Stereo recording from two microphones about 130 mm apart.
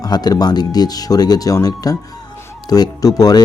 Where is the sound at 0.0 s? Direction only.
30° left (ahead or behind).